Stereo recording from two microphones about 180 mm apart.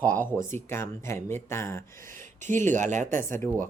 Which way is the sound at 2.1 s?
45° right (ahead or behind).